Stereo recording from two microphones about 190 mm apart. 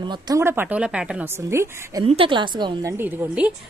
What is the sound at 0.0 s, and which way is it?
A woman's voice, 20° right (ahead or behind).